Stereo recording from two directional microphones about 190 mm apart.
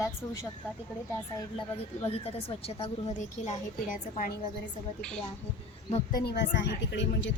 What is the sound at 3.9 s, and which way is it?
Speech, 45° left (ahead or behind).